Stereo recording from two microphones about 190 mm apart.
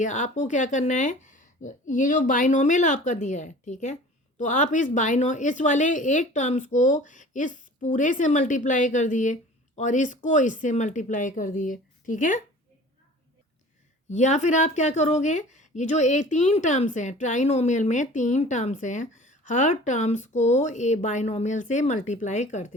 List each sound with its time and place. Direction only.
0.0 s a woman's voice: 40° left (ahead or behind)
14.1 s speech: 40° left (ahead or behind)